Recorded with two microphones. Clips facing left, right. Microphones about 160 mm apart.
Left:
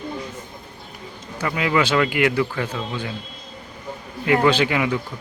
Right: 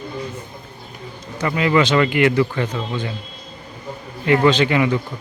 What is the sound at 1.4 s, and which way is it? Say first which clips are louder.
Speech: right 4 dB; 5° left (ahead or behind).